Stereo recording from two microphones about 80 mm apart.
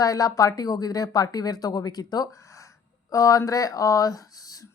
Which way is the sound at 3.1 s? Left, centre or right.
Left.